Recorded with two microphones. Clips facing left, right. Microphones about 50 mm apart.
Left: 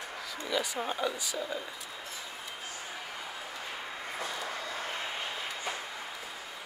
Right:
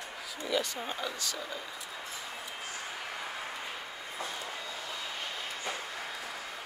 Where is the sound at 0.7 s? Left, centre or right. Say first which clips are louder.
Left 4 dB; centre.